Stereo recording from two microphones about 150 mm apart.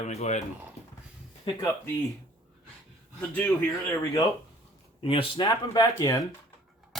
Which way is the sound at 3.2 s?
10° left (ahead or behind).